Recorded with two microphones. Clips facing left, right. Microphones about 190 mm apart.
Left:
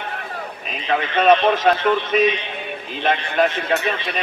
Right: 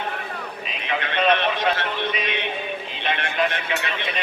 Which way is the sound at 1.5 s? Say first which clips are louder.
Left 7 dB; 45° left (ahead or behind).